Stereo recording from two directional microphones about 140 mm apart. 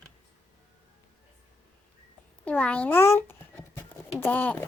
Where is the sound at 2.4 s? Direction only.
10° left (ahead or behind).